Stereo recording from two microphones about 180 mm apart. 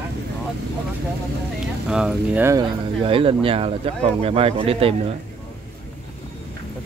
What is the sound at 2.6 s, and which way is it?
Speech, 30° right (ahead or behind).